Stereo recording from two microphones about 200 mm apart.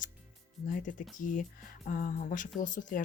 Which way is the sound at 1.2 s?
40° left (ahead or behind).